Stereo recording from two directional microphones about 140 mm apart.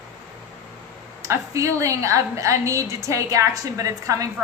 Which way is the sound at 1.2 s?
20° right (ahead or behind).